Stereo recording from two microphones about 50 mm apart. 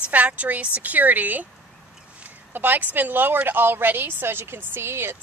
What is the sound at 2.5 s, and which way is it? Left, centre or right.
A woman's voice, right.